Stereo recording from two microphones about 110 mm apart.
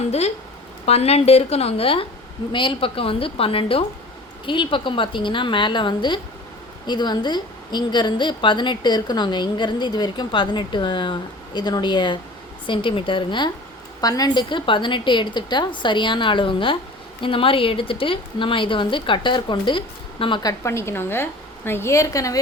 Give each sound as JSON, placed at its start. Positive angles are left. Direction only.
{"t": 0.9, "sound": "a woman's voice", "side_deg": 70}
{"t": 2.5, "sound": "a woman's voice", "side_deg": 50}
{"t": 14.0, "sound": "a woman's voice", "side_deg": 35}
{"t": 20.4, "sound": "a woman's voice", "side_deg": 30}